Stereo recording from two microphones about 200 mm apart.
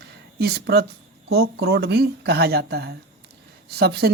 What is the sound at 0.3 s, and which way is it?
Speech, 55° right (ahead or behind).